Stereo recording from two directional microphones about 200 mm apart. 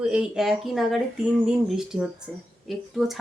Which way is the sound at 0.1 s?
5° right (ahead or behind).